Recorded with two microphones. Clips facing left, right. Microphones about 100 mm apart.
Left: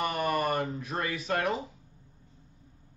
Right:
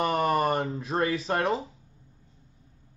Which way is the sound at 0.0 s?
30° right (ahead or behind).